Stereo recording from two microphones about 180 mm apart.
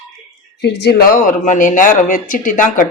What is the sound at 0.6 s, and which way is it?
Speech, 70° left (ahead or behind).